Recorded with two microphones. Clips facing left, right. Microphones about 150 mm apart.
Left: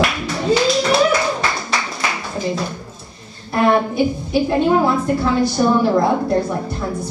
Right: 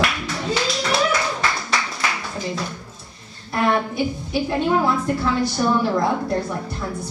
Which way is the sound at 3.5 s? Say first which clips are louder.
Left 5 dB; 30° left (ahead or behind).